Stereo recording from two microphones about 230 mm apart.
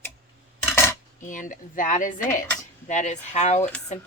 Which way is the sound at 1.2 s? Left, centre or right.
Left.